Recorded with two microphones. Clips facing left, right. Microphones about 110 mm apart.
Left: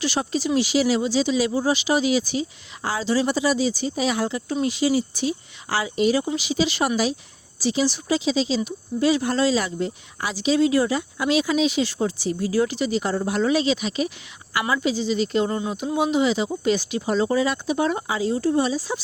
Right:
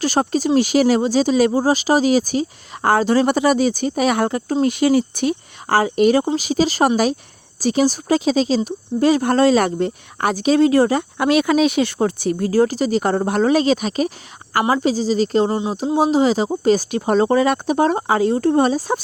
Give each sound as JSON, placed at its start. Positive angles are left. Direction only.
{"t": 0.0, "sound": "speech", "side_deg": -45}
{"t": 15.4, "sound": "speech", "side_deg": -25}
{"t": 16.0, "sound": "speech", "side_deg": -35}